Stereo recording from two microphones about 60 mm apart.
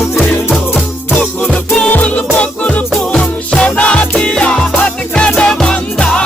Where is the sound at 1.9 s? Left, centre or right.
Left.